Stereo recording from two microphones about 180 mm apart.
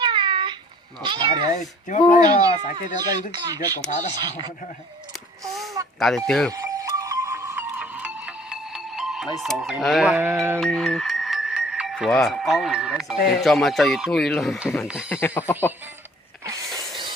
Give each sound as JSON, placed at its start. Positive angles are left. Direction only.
{"t": 0.0, "sound": "cat", "side_deg": -25}
{"t": 1.0, "sound": "speech", "side_deg": -25}
{"t": 1.9, "sound": "speech", "side_deg": 45}
{"t": 2.2, "sound": "speech", "side_deg": -25}
{"t": 6.0, "sound": "speech", "side_deg": 0}
{"t": 6.5, "sound": "wind chime", "side_deg": -20}
{"t": 9.4, "sound": "speech", "side_deg": 0}
{"t": 10.6, "sound": "speech", "side_deg": 0}
{"t": 15.1, "sound": "speech", "side_deg": 10}